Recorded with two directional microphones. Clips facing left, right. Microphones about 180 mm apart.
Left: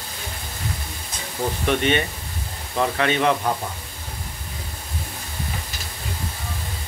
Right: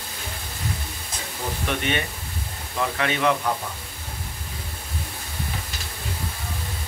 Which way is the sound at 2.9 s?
35° left (ahead or behind).